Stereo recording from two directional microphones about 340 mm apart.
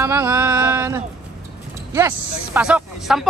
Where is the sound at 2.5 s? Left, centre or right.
Centre.